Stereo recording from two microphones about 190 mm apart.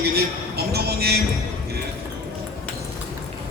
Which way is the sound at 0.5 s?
55° right (ahead or behind).